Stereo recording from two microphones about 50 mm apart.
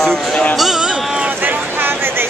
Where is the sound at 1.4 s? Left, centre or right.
Right.